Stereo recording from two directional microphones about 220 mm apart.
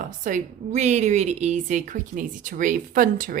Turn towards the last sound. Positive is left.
turn(degrees=-40)  # may be behind; listen again after turning